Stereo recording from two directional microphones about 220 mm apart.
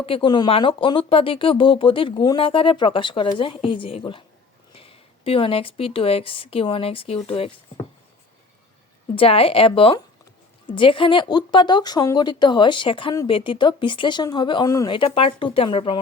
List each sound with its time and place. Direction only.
0.0 s a woman's voice: 25° left (ahead or behind)
9.1 s speech: 25° left (ahead or behind)